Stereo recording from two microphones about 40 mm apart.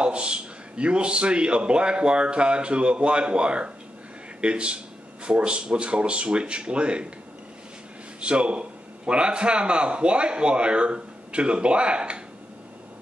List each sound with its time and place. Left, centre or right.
0.0 s a man's voice: right
8.2 s a man's voice: right